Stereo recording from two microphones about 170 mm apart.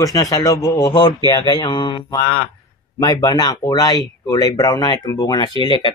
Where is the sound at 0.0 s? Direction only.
20° left (ahead or behind).